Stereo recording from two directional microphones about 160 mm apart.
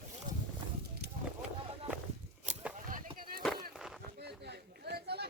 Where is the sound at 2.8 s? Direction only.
55° right (ahead or behind).